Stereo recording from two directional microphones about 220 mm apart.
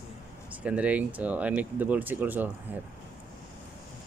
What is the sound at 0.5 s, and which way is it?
Speech, 5° right (ahead or behind).